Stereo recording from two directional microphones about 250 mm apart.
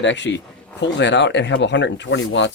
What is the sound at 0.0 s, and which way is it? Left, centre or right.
Speech, left.